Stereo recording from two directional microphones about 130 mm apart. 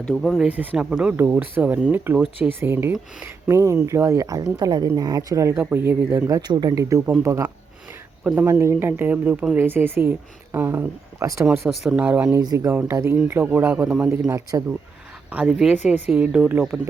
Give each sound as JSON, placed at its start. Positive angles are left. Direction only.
{"t": 0.0, "sound": "speech", "side_deg": 5}
{"t": 0.4, "sound": "speech", "side_deg": -15}
{"t": 11.7, "sound": "speech", "side_deg": -5}
{"t": 13.1, "sound": "speech", "side_deg": -10}
{"t": 15.3, "sound": "speech", "side_deg": -10}